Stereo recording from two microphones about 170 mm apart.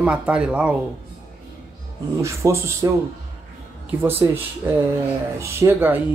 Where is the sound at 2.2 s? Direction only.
15° right (ahead or behind).